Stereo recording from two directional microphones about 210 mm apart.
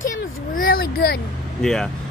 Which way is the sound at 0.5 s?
45° left (ahead or behind).